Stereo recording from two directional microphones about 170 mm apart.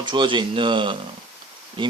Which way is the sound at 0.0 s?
30° right (ahead or behind).